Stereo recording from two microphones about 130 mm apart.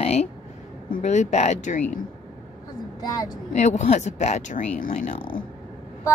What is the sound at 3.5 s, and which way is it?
Speech, 65° left (ahead or behind).